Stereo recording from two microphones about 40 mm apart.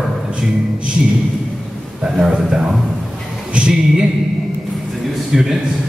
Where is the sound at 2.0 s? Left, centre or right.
Centre.